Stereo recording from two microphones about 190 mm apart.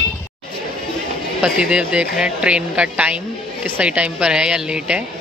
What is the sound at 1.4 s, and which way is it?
Speech, 5° right (ahead or behind).